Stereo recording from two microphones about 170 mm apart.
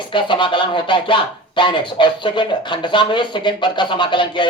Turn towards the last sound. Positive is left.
turn(degrees=30)  # may be behind; listen again after turning